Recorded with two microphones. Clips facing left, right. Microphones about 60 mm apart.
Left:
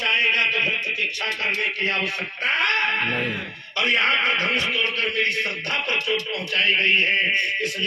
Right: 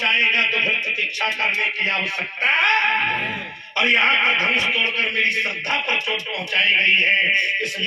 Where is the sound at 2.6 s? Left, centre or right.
Centre.